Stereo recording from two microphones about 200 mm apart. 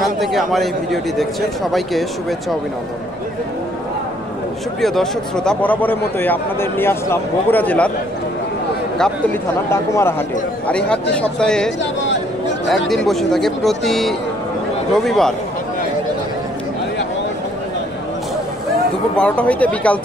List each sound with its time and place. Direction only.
0.2 s a man's voice: centre (ahead or behind)
4.8 s a man's voice: centre (ahead or behind)
8.9 s a man's voice: 5° left (ahead or behind)
11.8 s a sound: 65° left (ahead or behind)
12.6 s a man's voice: centre (ahead or behind)
19.1 s a man's voice: 5° left (ahead or behind)